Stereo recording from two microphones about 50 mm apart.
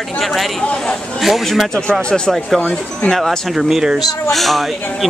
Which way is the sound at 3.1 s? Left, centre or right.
Centre.